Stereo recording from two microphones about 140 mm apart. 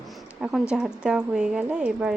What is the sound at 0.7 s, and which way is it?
A woman's voice, 5° right (ahead or behind).